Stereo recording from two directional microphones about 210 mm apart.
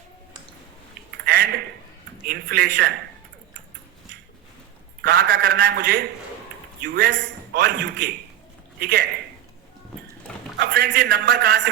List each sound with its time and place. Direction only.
1.2 s a sound: 45° right (ahead or behind)
2.2 s a man's voice: 45° right (ahead or behind)
5.0 s a man's voice: 45° right (ahead or behind)
10.6 s a man's voice: 50° right (ahead or behind)